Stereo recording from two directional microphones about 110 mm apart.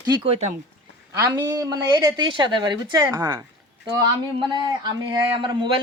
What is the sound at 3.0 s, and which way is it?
Speech, 30° right (ahead or behind).